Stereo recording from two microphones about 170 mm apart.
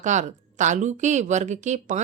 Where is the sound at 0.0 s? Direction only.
45° right (ahead or behind).